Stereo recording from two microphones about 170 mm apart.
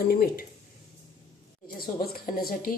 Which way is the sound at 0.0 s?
60° left (ahead or behind).